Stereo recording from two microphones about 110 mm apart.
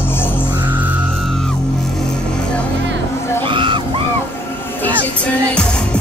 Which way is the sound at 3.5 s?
50° right (ahead or behind).